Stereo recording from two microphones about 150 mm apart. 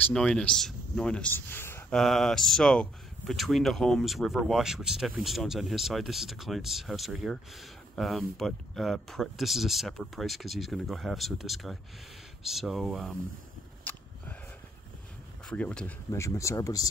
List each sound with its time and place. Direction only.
0.1 s speech: 5° left (ahead or behind)
2.0 s speech: centre (ahead or behind)
15.4 s speech: 5° left (ahead or behind)
16.1 s speech: 20° left (ahead or behind)